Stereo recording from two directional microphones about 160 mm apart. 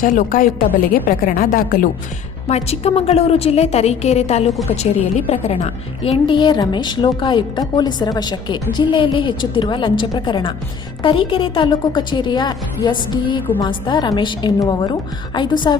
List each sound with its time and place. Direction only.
0.0 s speech: 60° left (ahead or behind)
2.5 s a woman's voice: 40° left (ahead or behind)